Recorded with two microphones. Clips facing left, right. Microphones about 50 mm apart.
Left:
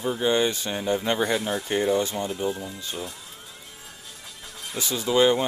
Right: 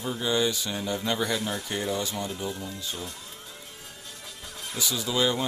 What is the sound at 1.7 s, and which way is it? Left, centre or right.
Speech, left.